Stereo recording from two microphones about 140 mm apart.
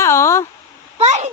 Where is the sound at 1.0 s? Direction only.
55° right (ahead or behind).